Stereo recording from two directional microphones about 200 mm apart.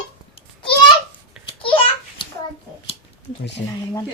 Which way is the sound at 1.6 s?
25° left (ahead or behind).